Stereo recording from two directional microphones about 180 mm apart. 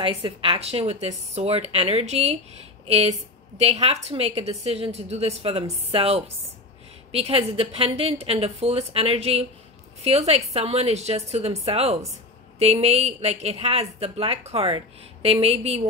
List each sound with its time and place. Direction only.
0.0 s a woman's voice: 30° right (ahead or behind)